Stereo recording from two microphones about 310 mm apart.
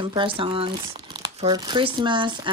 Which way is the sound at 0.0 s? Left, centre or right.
Centre.